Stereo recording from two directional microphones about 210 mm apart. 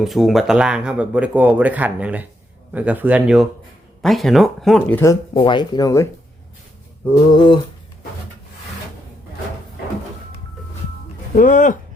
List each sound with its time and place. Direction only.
0.0 s speech: centre (ahead or behind)
5.3 s speech: 25° left (ahead or behind)
7.1 s speech: 20° left (ahead or behind)
11.3 s speech: 40° left (ahead or behind)